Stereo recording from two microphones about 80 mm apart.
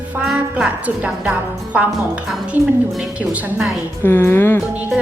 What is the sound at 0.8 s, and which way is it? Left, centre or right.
A woman's voice, centre.